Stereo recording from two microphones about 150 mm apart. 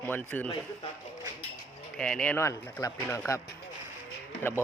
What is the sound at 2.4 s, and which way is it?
Speech, 20° left (ahead or behind).